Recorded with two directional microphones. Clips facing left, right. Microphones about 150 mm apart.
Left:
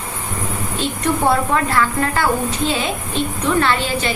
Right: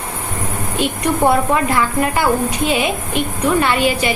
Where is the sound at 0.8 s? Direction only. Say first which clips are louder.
Right 3 dB; 15° right (ahead or behind).